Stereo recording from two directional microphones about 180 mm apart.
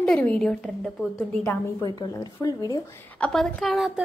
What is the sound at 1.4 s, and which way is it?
Speech, 15° left (ahead or behind).